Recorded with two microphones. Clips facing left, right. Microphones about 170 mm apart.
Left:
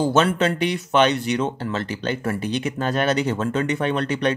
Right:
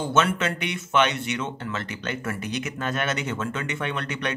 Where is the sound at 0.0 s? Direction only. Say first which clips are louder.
Left 5 dB; 35° left (ahead or behind).